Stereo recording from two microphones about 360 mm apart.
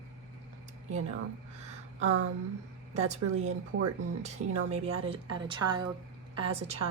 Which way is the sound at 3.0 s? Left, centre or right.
Right.